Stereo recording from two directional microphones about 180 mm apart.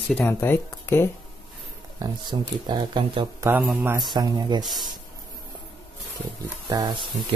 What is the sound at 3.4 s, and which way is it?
A man's voice, 10° right (ahead or behind).